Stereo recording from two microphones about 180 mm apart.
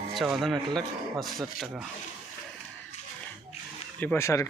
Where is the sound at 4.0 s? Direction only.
10° left (ahead or behind).